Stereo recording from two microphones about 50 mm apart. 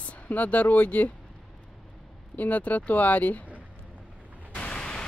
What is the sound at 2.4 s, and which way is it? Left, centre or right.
Speech, left.